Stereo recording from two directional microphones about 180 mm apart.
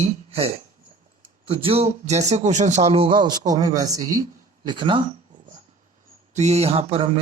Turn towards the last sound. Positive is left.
turn(degrees=-30)  # may be behind; listen again after turning